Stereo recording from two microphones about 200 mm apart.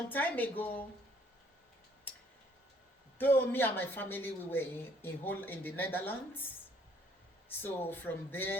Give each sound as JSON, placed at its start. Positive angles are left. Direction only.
{"t": 0.1, "sound": "speech", "side_deg": 10}
{"t": 3.2, "sound": "speech", "side_deg": 10}
{"t": 7.6, "sound": "speech", "side_deg": 10}